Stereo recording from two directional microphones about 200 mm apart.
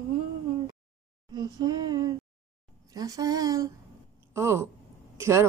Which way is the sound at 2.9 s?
20° right (ahead or behind).